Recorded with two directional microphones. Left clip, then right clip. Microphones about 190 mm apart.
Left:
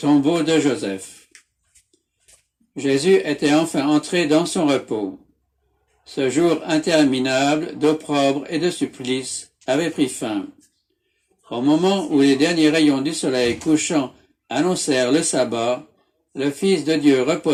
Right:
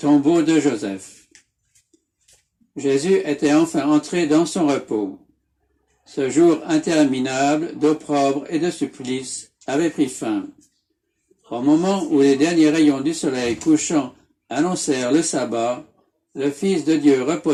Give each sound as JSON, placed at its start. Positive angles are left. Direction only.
{"t": 0.0, "sound": "speech", "side_deg": 25}
{"t": 2.7, "sound": "speech", "side_deg": 25}
{"t": 6.1, "sound": "speech", "side_deg": 25}
{"t": 11.4, "sound": "speech", "side_deg": 30}